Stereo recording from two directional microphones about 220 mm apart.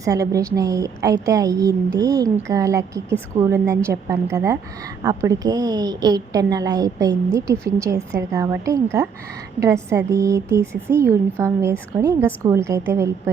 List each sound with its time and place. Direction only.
0.0 s speech: 15° right (ahead or behind)